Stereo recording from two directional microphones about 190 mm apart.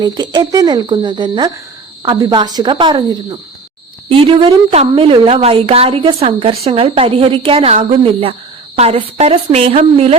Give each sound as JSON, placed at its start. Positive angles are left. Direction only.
{"t": 0.0, "sound": "a woman's voice", "side_deg": -20}